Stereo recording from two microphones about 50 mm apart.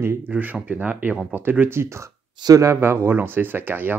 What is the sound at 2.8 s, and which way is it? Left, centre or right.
Speech, right.